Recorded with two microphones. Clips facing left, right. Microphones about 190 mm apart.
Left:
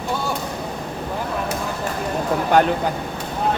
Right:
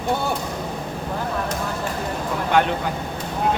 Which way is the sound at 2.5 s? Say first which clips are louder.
Left 3 dB; 40° left (ahead or behind).